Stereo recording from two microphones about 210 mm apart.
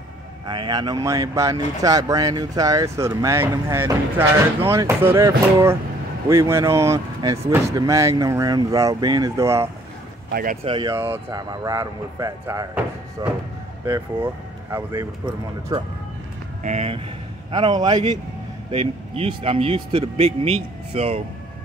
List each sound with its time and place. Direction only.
0.5 s speech: 20° right (ahead or behind)
10.3 s speech: 40° right (ahead or behind)
10.6 s speech: 25° right (ahead or behind)
11.0 s speech: 10° right (ahead or behind)
16.6 s speech: 30° right (ahead or behind)
17.5 s speech: 20° right (ahead or behind)